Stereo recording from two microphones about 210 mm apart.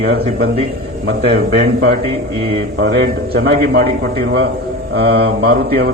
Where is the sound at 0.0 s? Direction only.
50° right (ahead or behind).